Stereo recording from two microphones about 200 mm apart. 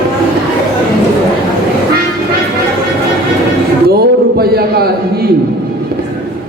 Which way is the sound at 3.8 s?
50° right (ahead or behind).